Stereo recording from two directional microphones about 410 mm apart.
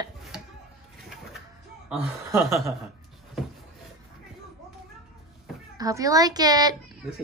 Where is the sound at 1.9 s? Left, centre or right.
Centre.